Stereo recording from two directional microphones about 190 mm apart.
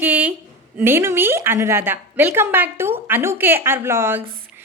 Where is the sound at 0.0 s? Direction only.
10° right (ahead or behind).